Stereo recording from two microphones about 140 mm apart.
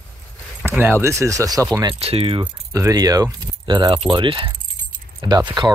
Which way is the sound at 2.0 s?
40° right (ahead or behind).